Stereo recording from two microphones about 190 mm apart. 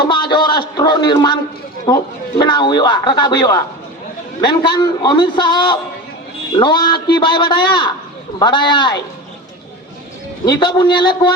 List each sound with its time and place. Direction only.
0.0 s a man's voice: 25° left (ahead or behind)
10.4 s a man's voice: 20° left (ahead or behind)